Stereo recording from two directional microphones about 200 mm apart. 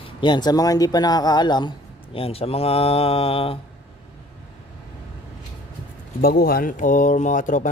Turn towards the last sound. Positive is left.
turn(degrees=40)  # may be behind; listen again after turning